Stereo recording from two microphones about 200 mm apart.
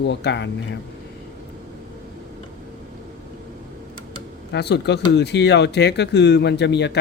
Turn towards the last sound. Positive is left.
turn(degrees=60)  # may be behind; listen again after turning